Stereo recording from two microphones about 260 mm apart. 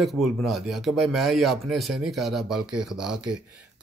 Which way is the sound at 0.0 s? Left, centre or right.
Centre.